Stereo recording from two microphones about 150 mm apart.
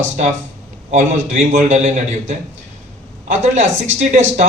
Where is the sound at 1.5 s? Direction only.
50° right (ahead or behind).